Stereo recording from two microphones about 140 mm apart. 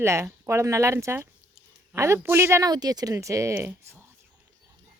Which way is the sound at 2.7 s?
30° right (ahead or behind).